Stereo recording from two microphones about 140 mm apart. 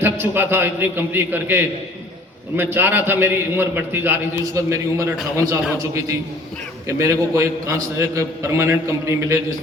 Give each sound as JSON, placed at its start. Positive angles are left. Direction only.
{"t": 0.0, "sound": "a man's voice", "side_deg": -15}
{"t": 6.8, "sound": "a man's voice", "side_deg": -20}